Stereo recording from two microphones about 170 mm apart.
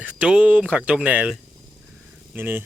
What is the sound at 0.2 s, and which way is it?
Speech, 5° right (ahead or behind).